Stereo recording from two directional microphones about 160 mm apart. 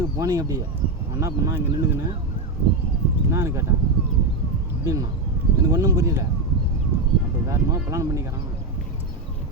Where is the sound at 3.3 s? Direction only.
20° right (ahead or behind).